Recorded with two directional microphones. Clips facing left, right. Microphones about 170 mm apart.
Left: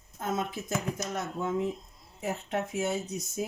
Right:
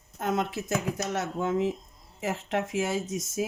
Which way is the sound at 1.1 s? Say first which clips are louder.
Right 3 dB; 85° right.